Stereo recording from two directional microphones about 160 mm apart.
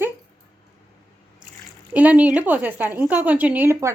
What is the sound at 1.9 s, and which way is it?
A woman's voice, 10° right (ahead or behind).